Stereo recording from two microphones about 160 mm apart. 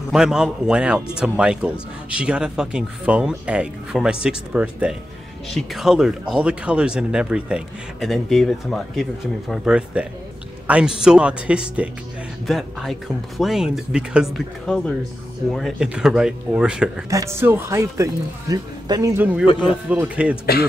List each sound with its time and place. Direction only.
0.1 s a man's voice: 5° right (ahead or behind)
17.1 s speech: 20° right (ahead or behind)
19.4 s speech: 30° left (ahead or behind)
19.9 s speech: 10° right (ahead or behind)